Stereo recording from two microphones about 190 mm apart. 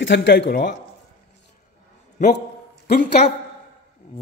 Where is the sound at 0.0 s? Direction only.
70° left (ahead or behind); by 0.7 s 50° left (ahead or behind).